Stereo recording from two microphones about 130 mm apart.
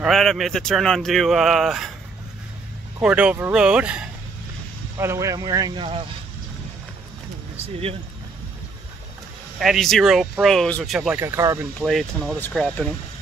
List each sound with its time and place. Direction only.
0.0 s speech: centre (ahead or behind)
3.0 s speech: 10° right (ahead or behind)
4.9 s speech: 20° right (ahead or behind)
5.8 s speech: 45° right (ahead or behind)
9.6 s speech: centre (ahead or behind)
11.1 s speech: 20° right (ahead or behind)
11.8 s speech: centre (ahead or behind)